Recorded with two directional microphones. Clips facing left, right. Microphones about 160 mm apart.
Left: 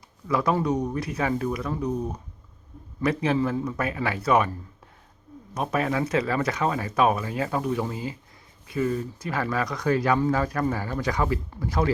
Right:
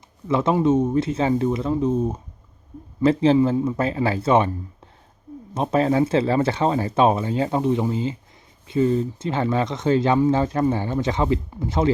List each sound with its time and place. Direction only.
0.3 s speech: 25° right (ahead or behind)
5.5 s speech: 30° right (ahead or behind)